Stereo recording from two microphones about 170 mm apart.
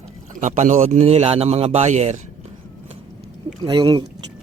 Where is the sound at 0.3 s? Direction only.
45° right (ahead or behind).